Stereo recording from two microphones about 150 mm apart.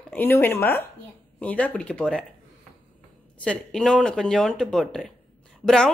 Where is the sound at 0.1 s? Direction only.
15° left (ahead or behind).